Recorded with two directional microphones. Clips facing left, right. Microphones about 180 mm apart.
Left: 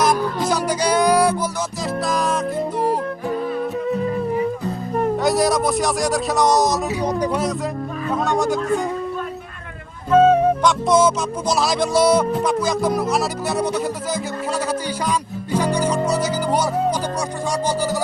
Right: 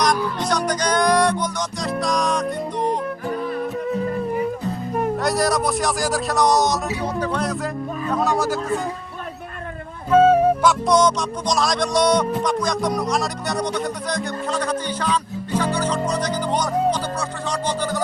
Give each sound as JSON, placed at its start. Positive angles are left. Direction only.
{"t": 0.0, "sound": "music", "side_deg": 5}
{"t": 4.9, "sound": "speech", "side_deg": 0}
{"t": 7.0, "sound": "speech", "side_deg": 15}
{"t": 8.1, "sound": "speech", "side_deg": 0}
{"t": 10.1, "sound": "music", "side_deg": -10}